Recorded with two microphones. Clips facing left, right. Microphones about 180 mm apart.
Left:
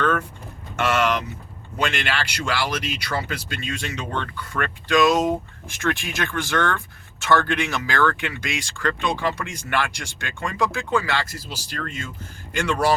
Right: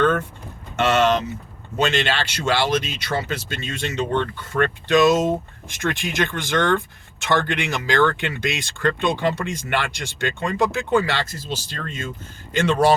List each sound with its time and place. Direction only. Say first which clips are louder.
0.0 s speech: right 3 dB; 25° right (ahead or behind)